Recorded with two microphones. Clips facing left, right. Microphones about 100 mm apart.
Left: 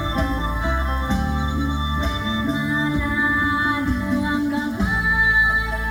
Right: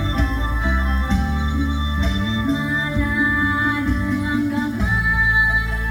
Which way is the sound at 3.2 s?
20° left (ahead or behind).